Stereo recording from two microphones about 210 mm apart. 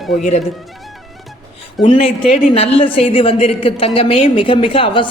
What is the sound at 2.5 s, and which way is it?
A woman's voice, 30° left (ahead or behind).